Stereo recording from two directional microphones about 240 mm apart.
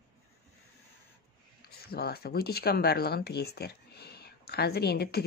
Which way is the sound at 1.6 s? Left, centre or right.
Left.